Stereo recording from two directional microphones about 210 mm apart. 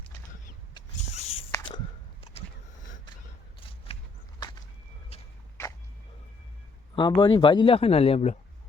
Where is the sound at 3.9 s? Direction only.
30° left (ahead or behind).